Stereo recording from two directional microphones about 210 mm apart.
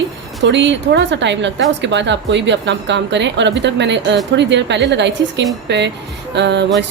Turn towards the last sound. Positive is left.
turn(degrees=-55)  # may be behind; listen again after turning